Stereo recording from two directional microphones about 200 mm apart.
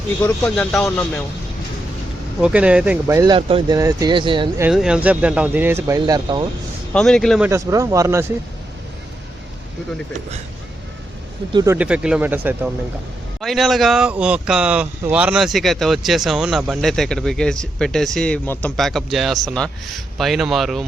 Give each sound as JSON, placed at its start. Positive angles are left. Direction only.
{"t": 0.2, "sound": "speech", "side_deg": 10}
{"t": 2.4, "sound": "speech", "side_deg": -5}
{"t": 4.6, "sound": "speech", "side_deg": -5}
{"t": 6.9, "sound": "speech", "side_deg": 5}
{"t": 7.4, "sound": "speech", "side_deg": -15}
{"t": 11.5, "sound": "speech", "side_deg": -15}